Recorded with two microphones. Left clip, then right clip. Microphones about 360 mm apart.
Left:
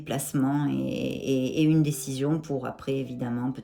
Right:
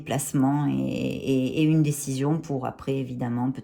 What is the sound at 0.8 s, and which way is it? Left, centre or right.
Mantra, right.